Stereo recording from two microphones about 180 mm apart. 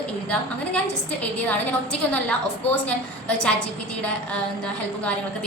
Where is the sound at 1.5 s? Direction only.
10° left (ahead or behind).